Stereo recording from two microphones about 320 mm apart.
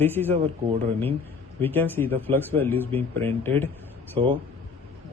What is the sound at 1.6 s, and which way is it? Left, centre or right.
A man's voice, centre.